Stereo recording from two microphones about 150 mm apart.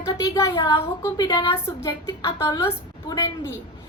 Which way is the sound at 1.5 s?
20° left (ahead or behind).